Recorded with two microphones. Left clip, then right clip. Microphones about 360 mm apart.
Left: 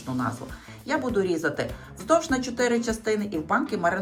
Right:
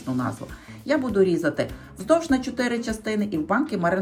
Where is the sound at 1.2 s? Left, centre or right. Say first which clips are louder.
Right 3 dB; centre.